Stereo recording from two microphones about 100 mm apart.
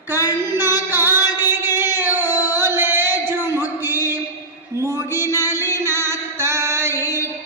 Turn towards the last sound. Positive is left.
turn(degrees=-25)  # may be behind; listen again after turning